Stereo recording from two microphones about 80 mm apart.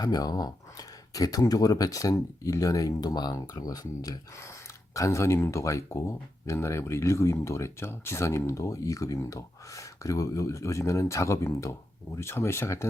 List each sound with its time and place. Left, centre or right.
0.0 s speech: left
4.9 s speech: left